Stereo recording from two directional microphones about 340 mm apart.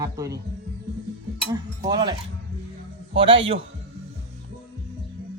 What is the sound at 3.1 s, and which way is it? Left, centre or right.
Speech, centre.